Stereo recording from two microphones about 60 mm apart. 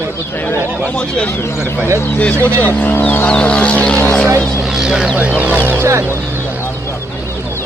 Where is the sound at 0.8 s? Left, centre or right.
Centre.